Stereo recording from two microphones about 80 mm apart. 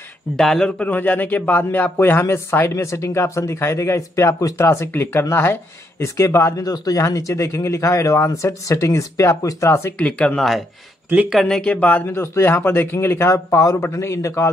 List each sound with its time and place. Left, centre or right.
0.4 s speech: centre
0.7 s a man's voice: centre; by 6.6 s left
6.6 s speech: left
9.7 s speech: left
9.9 s speech: centre
11.4 s speech: centre
12.1 s a man's voice: left